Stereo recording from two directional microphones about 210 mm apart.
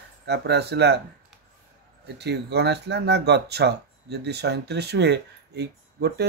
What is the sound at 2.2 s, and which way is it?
Speech, 55° right (ahead or behind).